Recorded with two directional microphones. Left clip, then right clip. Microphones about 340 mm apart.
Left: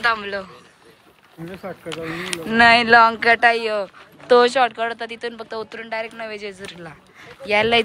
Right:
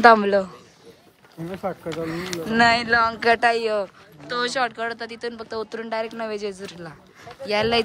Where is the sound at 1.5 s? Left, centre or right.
Centre.